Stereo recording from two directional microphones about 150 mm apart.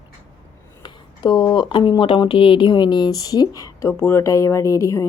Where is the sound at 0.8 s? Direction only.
30° left (ahead or behind).